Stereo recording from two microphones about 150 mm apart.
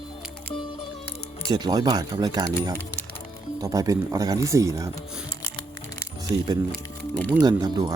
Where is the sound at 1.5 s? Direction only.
30° right (ahead or behind).